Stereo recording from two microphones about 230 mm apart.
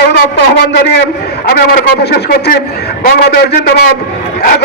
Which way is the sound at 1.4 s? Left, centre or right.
Left.